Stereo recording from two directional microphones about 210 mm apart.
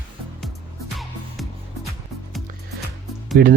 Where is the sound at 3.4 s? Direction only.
45° right (ahead or behind).